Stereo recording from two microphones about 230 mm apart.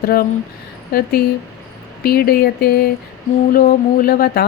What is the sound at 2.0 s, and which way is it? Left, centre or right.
Speech, left.